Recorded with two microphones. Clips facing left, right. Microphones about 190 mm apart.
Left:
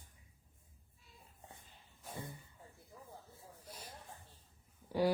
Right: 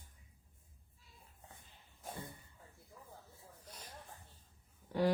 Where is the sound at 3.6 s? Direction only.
10° left (ahead or behind).